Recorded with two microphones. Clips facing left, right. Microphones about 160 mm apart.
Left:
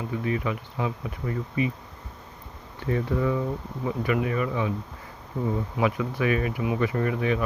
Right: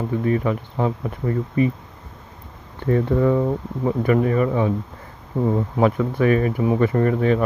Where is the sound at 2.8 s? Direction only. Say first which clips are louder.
Right 7 dB; 45° right (ahead or behind).